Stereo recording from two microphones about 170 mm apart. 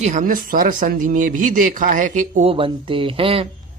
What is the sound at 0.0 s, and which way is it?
Speech, 50° right (ahead or behind).